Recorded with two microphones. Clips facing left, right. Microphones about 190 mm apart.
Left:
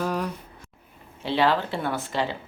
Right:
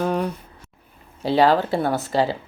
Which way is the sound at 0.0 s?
30° right (ahead or behind).